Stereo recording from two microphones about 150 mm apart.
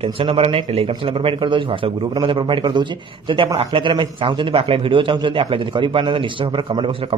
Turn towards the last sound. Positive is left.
turn(degrees=-35)  # may be behind; listen again after turning